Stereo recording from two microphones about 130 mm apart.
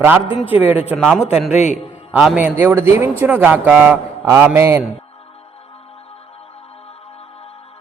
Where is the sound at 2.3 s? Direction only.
15° right (ahead or behind).